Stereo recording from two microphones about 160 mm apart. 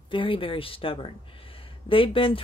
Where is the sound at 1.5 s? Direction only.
35° left (ahead or behind).